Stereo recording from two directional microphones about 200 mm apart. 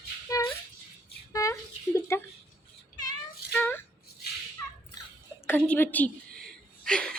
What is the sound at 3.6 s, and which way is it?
Rattle, 10° left (ahead or behind).